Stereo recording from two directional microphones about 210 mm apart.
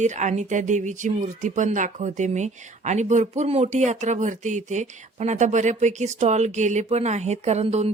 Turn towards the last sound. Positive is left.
turn(degrees=-30)  # may be behind; listen again after turning